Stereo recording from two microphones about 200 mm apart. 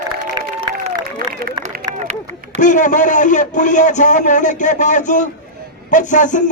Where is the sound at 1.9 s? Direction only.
20° right (ahead or behind).